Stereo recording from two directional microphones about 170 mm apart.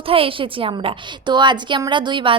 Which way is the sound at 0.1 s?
30° right (ahead or behind).